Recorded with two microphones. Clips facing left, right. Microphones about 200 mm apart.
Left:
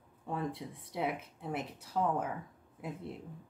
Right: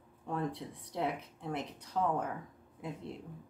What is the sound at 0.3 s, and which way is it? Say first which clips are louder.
Speech: right 1 dB; centre (ahead or behind).